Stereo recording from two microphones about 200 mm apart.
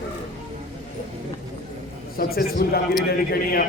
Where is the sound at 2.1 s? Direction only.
50° left (ahead or behind).